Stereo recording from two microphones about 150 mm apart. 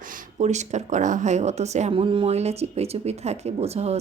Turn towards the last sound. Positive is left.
turn(degrees=-45)  # may be behind; listen again after turning